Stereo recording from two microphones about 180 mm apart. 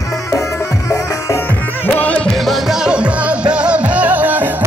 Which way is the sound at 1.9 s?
5° left (ahead or behind).